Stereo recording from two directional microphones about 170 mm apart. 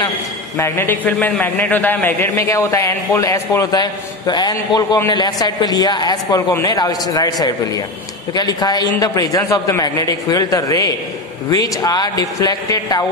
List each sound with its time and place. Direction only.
0.6 s a man's voice: 15° left (ahead or behind)
8.4 s a man's voice: 25° left (ahead or behind)